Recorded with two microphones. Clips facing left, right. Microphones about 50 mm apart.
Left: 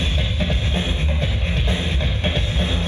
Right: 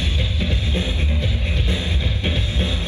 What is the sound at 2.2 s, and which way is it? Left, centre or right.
Music, left.